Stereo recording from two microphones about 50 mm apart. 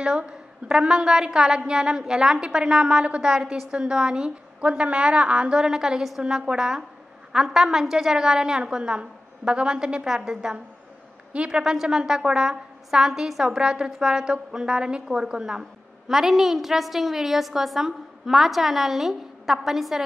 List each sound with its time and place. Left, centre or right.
0.0 s a woman's voice: centre